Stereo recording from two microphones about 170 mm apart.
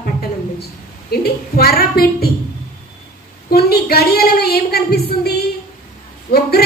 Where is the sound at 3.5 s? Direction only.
70° left (ahead or behind).